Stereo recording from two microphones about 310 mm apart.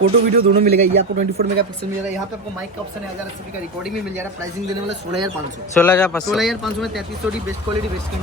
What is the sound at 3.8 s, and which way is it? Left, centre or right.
Speech, centre.